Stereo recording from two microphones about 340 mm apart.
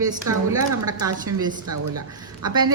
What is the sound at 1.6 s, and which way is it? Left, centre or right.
Speech, right.